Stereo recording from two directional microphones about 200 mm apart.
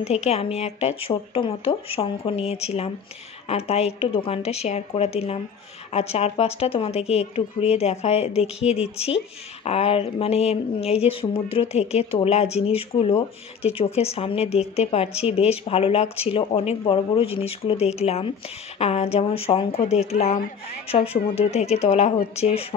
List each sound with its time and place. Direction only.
0.0 s speech: 30° left (ahead or behind)